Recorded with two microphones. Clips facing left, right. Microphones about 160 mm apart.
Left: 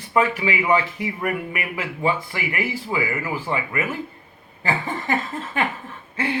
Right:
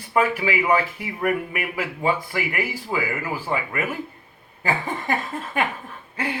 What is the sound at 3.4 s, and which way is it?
A man's voice, 10° right (ahead or behind).